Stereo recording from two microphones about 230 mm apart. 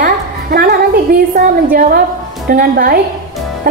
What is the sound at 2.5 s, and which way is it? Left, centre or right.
Speech, right.